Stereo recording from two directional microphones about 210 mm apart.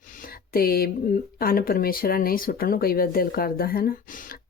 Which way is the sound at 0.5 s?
45° left (ahead or behind).